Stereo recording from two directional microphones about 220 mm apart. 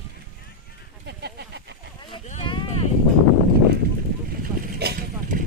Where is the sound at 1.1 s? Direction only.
50° right (ahead or behind).